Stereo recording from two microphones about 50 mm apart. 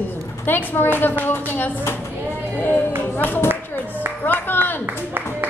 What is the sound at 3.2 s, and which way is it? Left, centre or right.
Speech, left.